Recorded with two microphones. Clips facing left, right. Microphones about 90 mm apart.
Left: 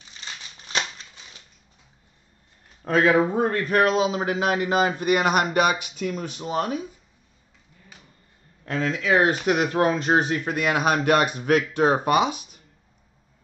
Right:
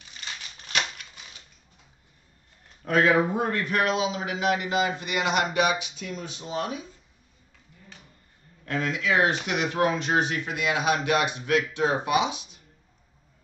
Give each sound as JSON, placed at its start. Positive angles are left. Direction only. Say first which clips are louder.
{"t": 0.2, "sound": "a sound", "louder": "even", "side_deg": 25}
{"t": 2.8, "sound": "a man's voice", "louder": "left 2 dB", "side_deg": 25}
{"t": 8.6, "sound": "a man's voice", "louder": "left 3 dB", "side_deg": 30}